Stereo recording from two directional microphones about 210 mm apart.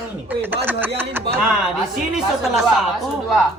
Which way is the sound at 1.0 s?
10° right (ahead or behind).